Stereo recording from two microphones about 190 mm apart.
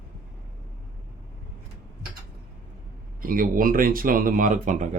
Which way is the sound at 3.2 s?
45° right (ahead or behind).